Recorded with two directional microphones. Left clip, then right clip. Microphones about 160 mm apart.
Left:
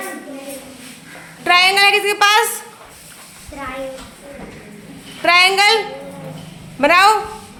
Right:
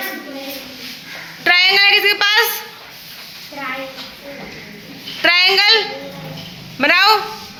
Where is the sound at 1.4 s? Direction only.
15° left (ahead or behind).